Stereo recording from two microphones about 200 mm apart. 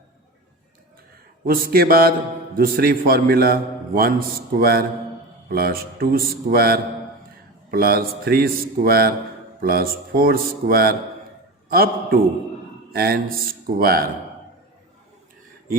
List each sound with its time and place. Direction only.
1.5 s a man's voice: 50° right (ahead or behind)